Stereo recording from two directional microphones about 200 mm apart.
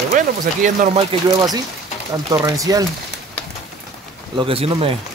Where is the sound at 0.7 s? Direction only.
40° right (ahead or behind).